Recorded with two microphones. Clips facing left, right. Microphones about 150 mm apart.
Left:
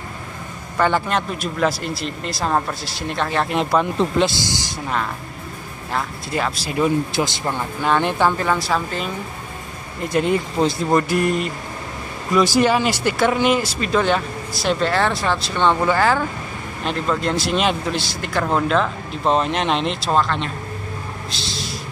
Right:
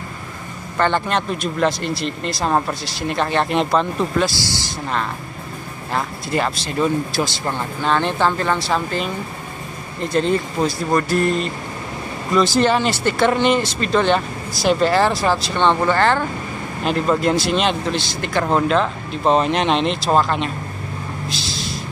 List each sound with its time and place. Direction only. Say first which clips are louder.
0.7 s speech: even; 5° left (ahead or behind)
4.0 s speech: left 1 dB; 20° left (ahead or behind)
5.9 s speech: right 2 dB; centre (ahead or behind)
7.1 s speech: even; 20° left (ahead or behind); by 9.1 s centre (ahead or behind)
10.0 s speech: right 1 dB; 10° left (ahead or behind)
17.2 s speech: right 3 dB; 5° right (ahead or behind)
17.6 s speech: right 1 dB; 5° left (ahead or behind)